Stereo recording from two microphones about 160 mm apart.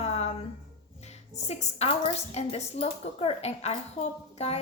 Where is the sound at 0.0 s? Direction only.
40° left (ahead or behind).